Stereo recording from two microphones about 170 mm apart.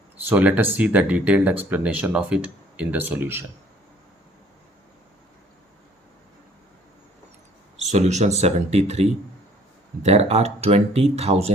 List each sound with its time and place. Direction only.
0.3 s speech: 10° right (ahead or behind)
7.8 s speech: 40° right (ahead or behind)